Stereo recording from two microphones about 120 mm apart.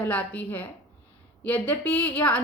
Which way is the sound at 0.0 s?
10° left (ahead or behind).